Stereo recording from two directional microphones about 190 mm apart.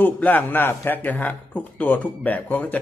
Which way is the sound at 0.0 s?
10° left (ahead or behind).